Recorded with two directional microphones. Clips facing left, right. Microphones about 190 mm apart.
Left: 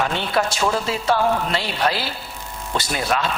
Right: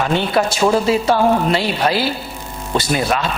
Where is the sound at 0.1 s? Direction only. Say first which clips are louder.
Right 5 dB; 10° right (ahead or behind).